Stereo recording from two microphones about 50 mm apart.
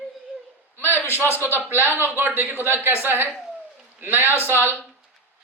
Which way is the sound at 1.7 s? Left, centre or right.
Left.